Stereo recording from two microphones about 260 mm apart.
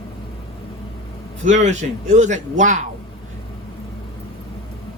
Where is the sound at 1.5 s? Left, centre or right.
Right.